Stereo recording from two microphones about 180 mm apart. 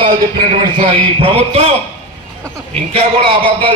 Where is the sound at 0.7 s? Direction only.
30° right (ahead or behind).